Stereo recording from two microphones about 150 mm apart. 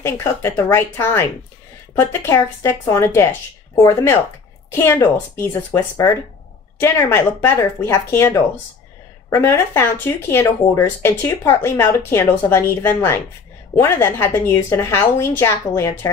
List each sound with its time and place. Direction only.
0.0 s speech: 20° left (ahead or behind)